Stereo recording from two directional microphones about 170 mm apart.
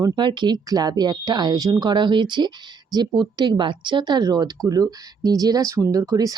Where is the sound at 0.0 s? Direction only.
25° right (ahead or behind).